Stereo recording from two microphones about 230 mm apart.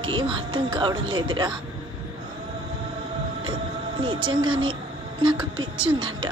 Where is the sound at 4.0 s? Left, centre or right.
Right.